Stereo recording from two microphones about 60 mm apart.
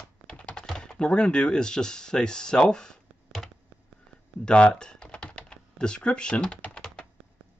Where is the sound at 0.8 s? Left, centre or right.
Centre.